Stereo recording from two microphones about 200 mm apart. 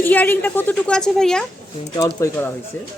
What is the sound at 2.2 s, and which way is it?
Speech, 15° left (ahead or behind).